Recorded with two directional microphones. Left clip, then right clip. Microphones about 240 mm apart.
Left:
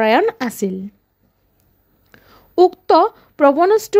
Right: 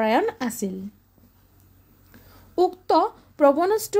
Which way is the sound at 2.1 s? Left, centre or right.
Left.